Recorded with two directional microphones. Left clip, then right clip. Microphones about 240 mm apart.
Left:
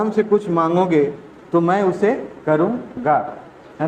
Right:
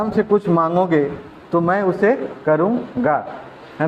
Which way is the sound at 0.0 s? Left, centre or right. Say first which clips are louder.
Even; right.